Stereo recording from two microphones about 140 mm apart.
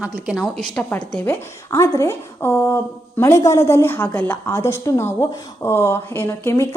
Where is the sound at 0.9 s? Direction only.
15° left (ahead or behind).